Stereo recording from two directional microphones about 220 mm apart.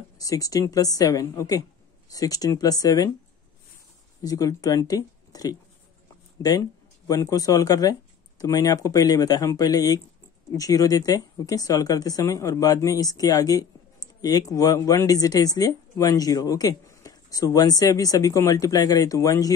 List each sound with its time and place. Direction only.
0.2 s speech: 15° left (ahead or behind)
4.2 s speech: 15° left (ahead or behind)